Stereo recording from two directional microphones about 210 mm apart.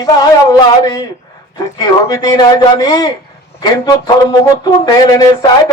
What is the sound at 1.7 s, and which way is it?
A man's voice, 20° left (ahead or behind).